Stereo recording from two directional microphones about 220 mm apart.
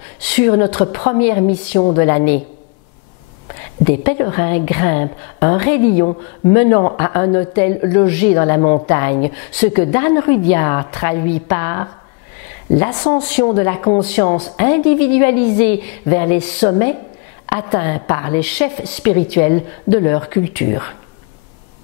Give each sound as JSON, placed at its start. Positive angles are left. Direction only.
{"t": 0.2, "sound": "a woman's voice", "side_deg": 10}
{"t": 4.0, "sound": "a woman's voice", "side_deg": 15}
{"t": 14.0, "sound": "a woman's voice", "side_deg": 10}